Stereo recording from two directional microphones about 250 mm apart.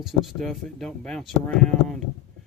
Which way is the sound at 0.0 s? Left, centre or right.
Centre.